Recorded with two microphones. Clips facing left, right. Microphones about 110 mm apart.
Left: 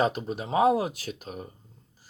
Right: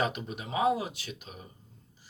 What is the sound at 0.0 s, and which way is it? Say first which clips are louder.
Speech: left 5 dB; 35° left (ahead or behind).